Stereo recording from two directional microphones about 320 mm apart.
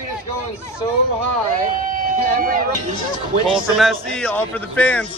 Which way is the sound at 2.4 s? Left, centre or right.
Right.